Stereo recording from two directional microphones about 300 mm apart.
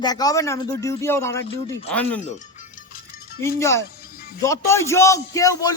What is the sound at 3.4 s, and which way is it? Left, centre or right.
Speech, centre.